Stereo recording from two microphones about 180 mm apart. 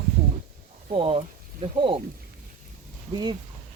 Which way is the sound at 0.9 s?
30° right (ahead or behind).